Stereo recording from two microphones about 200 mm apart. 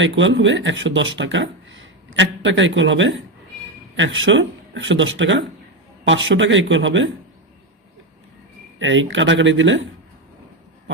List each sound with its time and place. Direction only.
0.0 s speech: 70° right (ahead or behind)
8.8 s speech: 70° right (ahead or behind)